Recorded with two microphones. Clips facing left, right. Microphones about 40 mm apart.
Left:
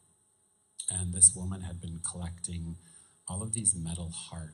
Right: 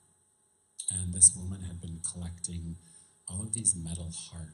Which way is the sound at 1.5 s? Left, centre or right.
Left.